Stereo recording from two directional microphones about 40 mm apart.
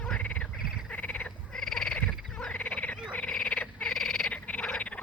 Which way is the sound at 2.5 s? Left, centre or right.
Left.